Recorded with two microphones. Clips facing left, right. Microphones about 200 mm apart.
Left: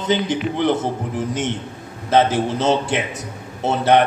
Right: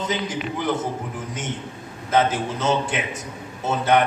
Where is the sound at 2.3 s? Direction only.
65° left (ahead or behind).